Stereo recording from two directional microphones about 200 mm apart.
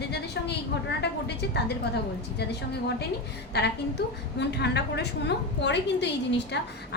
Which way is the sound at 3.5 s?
55° left (ahead or behind).